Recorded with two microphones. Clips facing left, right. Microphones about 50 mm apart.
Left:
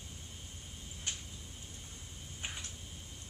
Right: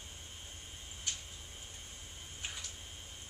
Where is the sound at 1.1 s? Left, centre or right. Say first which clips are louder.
Left 1 dB; left.